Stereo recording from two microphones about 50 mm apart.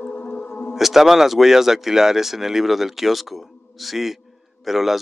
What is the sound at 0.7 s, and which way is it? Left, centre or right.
Speech, centre.